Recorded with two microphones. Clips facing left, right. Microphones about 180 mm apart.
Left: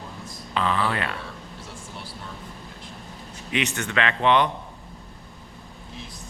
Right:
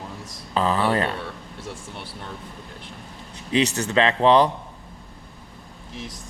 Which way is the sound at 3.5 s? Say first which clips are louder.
Right 6 dB; 35° right (ahead or behind).